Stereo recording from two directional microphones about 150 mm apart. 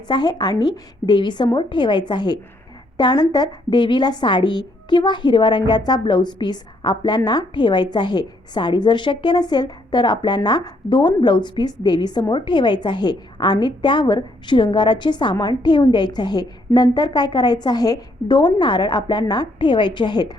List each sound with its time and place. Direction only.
0.1 s a woman's voice: 25° left (ahead or behind)